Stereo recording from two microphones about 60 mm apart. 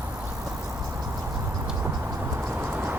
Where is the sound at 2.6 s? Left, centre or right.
Right.